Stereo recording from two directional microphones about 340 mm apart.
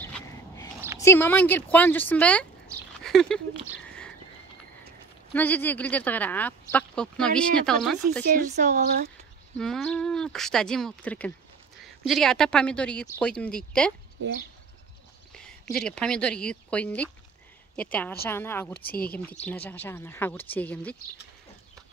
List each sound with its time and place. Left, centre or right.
0.0 s a sound: centre
0.9 s speech: centre
3.0 s a sound: centre
5.3 s speech: centre
8.3 s speech: right
9.6 s speech: centre
15.3 s a woman's voice: centre
18.9 s speech: left
19.4 s speech: centre
21.8 s chicken: centre